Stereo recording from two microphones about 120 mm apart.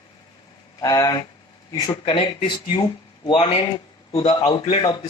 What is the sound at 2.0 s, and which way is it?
Speech, 45° left (ahead or behind).